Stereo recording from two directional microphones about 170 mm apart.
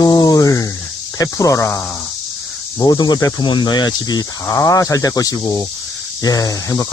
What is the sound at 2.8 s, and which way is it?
Speech, 25° left (ahead or behind).